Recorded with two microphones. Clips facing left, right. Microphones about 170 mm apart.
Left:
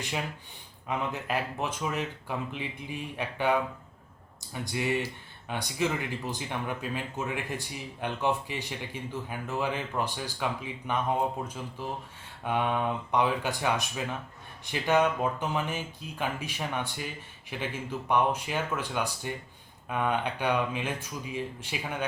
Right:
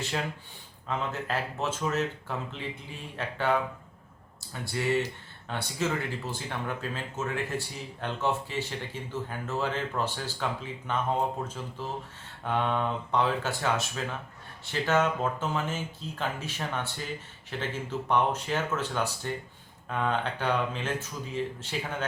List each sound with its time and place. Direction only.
0.9 s speech: 15° left (ahead or behind)
4.6 s speech: 15° left (ahead or behind)